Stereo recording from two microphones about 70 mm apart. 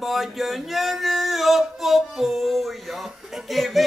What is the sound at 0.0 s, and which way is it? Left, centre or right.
Male singing, centre.